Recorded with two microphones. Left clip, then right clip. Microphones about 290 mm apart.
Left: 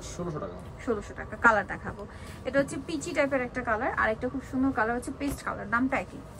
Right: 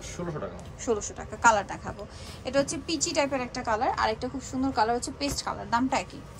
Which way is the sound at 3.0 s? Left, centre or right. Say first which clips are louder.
Left 1 dB; centre.